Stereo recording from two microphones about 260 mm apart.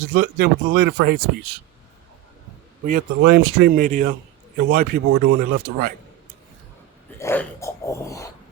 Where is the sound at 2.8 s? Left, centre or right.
Right.